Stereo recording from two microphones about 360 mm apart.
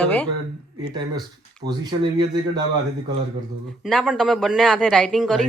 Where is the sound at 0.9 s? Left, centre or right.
Centre.